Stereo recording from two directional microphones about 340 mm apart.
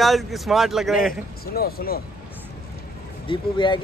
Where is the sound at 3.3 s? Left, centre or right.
Centre.